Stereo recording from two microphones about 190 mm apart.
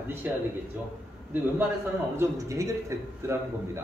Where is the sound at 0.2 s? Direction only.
10° right (ahead or behind).